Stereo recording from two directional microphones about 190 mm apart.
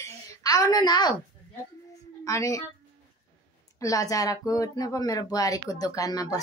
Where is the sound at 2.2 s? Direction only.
15° left (ahead or behind).